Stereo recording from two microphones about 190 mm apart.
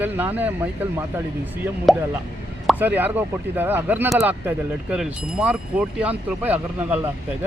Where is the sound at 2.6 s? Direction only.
10° right (ahead or behind).